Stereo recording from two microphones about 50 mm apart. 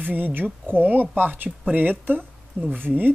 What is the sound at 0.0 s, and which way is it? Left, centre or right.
A woman's voice, right.